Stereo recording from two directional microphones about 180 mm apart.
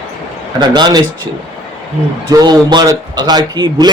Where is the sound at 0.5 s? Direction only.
25° right (ahead or behind).